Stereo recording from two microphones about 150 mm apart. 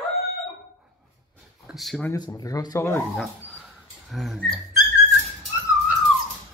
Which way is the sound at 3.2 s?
Centre (ahead or behind).